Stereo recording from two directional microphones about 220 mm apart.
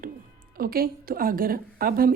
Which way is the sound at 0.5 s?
40° right (ahead or behind).